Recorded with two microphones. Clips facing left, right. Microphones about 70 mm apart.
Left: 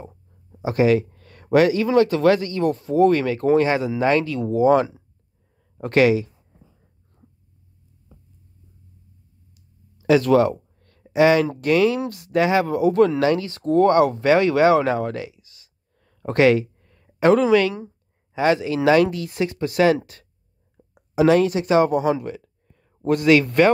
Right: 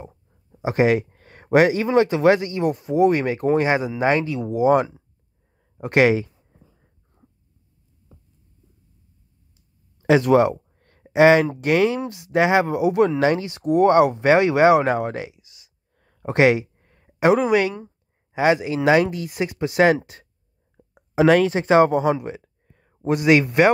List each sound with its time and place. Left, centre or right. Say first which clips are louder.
0.6 s speech: left 1 dB; right
10.0 s a sound: even; right
11.1 s speech: right 2 dB; right
17.3 s speech: left 2 dB; centre
20.7 s a sound: right 1 dB; right
23.0 s speech: left 1 dB; centre